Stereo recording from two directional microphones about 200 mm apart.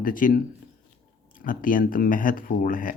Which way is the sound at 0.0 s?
45° left (ahead or behind).